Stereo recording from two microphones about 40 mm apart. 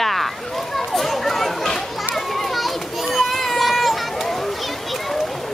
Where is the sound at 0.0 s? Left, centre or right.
Centre.